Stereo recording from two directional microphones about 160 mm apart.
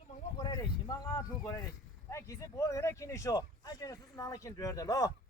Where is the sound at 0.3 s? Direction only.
25° left (ahead or behind).